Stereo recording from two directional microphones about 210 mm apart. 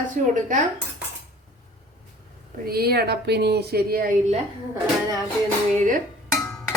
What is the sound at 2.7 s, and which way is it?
Speech, 45° right (ahead or behind).